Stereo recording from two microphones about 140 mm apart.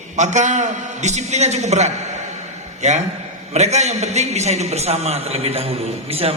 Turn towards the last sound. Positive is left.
turn(degrees=-45)  # may be behind; listen again after turning